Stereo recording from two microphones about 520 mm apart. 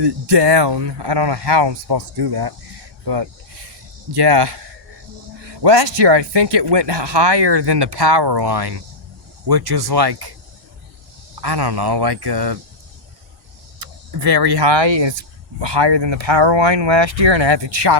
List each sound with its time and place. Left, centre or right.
0.0 s speech: right
4.1 s speech: right
11.3 s speech: right
13.7 s speech: right